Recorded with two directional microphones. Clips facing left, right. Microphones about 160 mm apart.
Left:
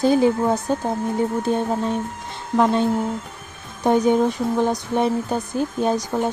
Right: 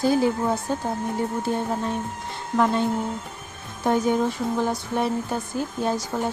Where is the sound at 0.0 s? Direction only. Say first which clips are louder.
Left 4 dB; 20° left (ahead or behind).